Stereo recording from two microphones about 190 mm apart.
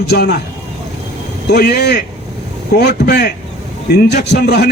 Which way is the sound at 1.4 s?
60° left (ahead or behind).